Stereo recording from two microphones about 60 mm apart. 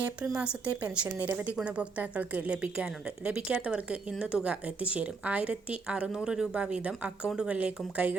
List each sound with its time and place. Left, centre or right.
0.3 s speech: centre